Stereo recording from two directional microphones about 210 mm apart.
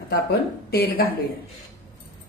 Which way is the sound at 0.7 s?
45° left (ahead or behind).